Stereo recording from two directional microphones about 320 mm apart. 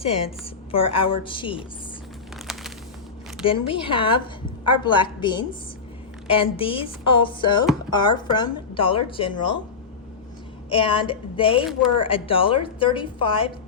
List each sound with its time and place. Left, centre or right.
0.0 s a woman's voice: centre
3.7 s a woman's voice: centre
10.7 s a woman's voice: centre